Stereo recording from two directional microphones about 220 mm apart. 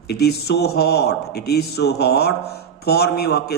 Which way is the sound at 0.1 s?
45° left (ahead or behind).